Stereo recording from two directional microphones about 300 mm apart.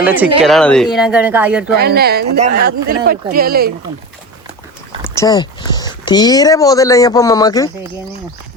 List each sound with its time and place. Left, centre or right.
0.0 s speech: centre
1.8 s speech: right
5.1 s speech: centre